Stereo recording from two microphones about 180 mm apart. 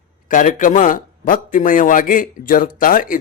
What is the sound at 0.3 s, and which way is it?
A man's voice, 45° left (ahead or behind).